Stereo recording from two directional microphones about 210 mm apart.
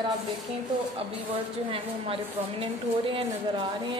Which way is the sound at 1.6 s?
25° right (ahead or behind).